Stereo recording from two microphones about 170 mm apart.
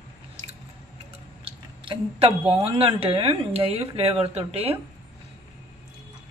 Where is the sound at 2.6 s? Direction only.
35° right (ahead or behind).